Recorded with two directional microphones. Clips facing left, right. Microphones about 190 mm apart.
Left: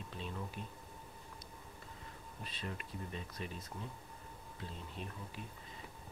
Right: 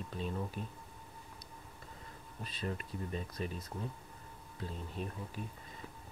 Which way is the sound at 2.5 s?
40° right (ahead or behind).